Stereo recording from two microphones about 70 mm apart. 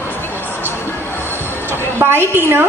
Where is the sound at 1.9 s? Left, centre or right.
Right.